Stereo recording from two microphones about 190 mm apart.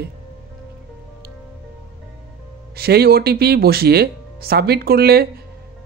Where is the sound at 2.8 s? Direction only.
55° right (ahead or behind).